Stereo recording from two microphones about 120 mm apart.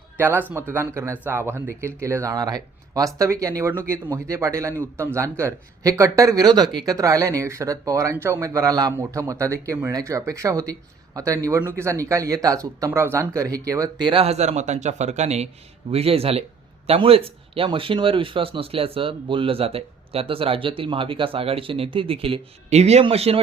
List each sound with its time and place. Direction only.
0.2 s speech: 20° right (ahead or behind)
14.1 s speech: 55° right (ahead or behind)
15.9 s speech: 55° right (ahead or behind)